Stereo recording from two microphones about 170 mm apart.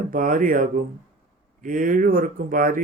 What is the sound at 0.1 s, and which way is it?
Speech, 50° right (ahead or behind).